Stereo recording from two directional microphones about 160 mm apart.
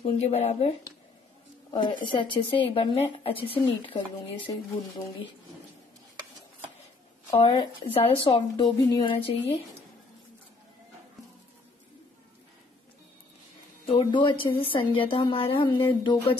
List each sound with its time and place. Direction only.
0.0 s speech: 40° left (ahead or behind)
1.7 s speech: 30° left (ahead or behind)
7.3 s speech: 30° left (ahead or behind)
13.8 s speech: 30° left (ahead or behind)